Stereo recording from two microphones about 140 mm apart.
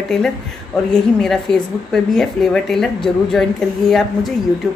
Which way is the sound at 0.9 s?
5° left (ahead or behind).